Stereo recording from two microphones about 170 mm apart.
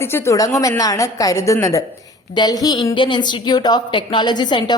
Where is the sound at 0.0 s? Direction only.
15° left (ahead or behind).